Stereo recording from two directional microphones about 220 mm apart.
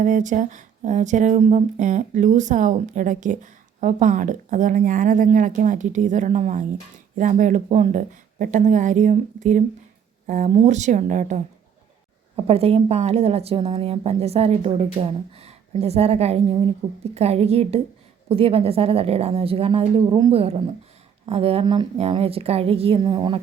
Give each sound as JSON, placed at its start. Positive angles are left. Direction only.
{"t": 0.0, "sound": "speech", "side_deg": -35}
{"t": 12.5, "sound": "a woman's voice", "side_deg": -25}